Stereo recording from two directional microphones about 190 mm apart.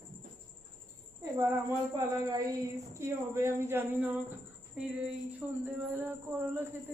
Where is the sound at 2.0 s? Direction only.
15° right (ahead or behind).